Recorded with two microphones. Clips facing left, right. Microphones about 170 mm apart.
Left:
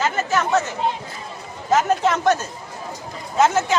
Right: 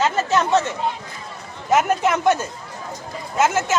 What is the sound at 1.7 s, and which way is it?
A woman's voice, 10° right (ahead or behind).